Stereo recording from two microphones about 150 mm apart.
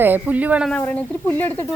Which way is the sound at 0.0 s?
10° right (ahead or behind).